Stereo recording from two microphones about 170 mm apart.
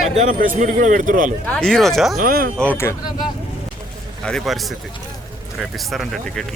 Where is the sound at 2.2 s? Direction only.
60° right (ahead or behind).